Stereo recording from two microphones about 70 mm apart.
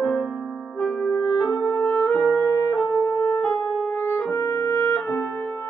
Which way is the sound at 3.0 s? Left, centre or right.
Left.